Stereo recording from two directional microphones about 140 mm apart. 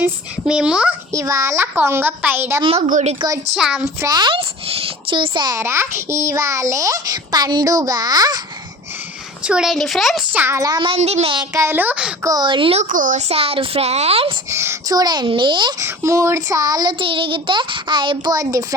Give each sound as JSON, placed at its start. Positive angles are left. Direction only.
{"t": 0.0, "sound": "a child's voice", "side_deg": -5}
{"t": 1.1, "sound": "a child's voice", "side_deg": -20}
{"t": 2.6, "sound": "speech", "side_deg": -45}
{"t": 3.2, "sound": "a child's voice", "side_deg": -25}
{"t": 3.5, "sound": "speech", "side_deg": -5}
{"t": 3.8, "sound": "child singing", "side_deg": -25}
{"t": 5.5, "sound": "a child's voice", "side_deg": -20}
{"t": 9.5, "sound": "speech", "side_deg": -5}
{"t": 10.3, "sound": "child singing", "side_deg": -15}
{"t": 11.3, "sound": "a child's voice", "side_deg": -20}
{"t": 12.2, "sound": "child singing", "side_deg": -30}
{"t": 12.8, "sound": "speech", "side_deg": -70}
{"t": 14.5, "sound": "child singing", "side_deg": -20}
{"t": 15.8, "sound": "child singing", "side_deg": -20}